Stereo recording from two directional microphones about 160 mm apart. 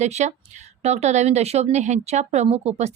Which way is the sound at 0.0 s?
45° right (ahead or behind).